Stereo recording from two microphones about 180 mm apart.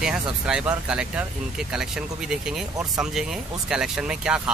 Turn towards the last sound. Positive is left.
turn(degrees=-5)  # may be behind; listen again after turning